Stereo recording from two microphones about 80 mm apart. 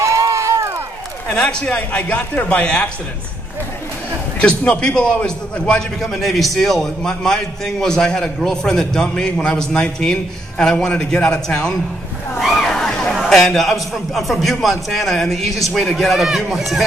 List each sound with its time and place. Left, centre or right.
0.0 s run: right
1.3 s a man's voice: centre
4.4 s a man's voice: centre